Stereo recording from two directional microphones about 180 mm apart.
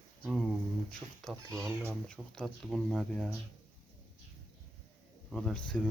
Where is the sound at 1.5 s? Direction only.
15° right (ahead or behind).